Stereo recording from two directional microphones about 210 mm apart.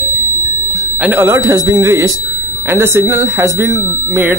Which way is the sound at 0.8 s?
5° right (ahead or behind).